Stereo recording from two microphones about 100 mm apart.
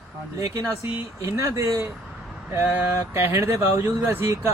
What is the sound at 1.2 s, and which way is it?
Speech, 30° right (ahead or behind).